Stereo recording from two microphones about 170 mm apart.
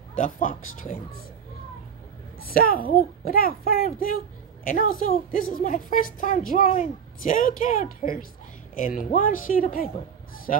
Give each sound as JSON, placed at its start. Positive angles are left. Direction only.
{"t": 0.1, "sound": "a woman's voice", "side_deg": 50}
{"t": 2.3, "sound": "a woman's voice", "side_deg": 60}